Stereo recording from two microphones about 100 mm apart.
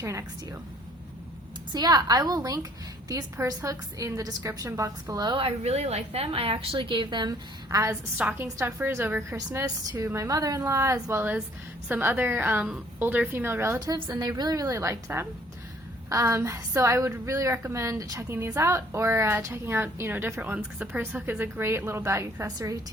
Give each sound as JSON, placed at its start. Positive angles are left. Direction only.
{"t": 0.0, "sound": "a woman's voice", "side_deg": -30}
{"t": 1.7, "sound": "a woman's voice", "side_deg": -40}
{"t": 5.4, "sound": "a woman's voice", "side_deg": -80}
{"t": 7.3, "sound": "a woman's voice", "side_deg": -35}
{"t": 8.2, "sound": "a woman's voice", "side_deg": -15}
{"t": 8.5, "sound": "a woman's voice", "side_deg": -25}
{"t": 13.7, "sound": "a woman's voice", "side_deg": -40}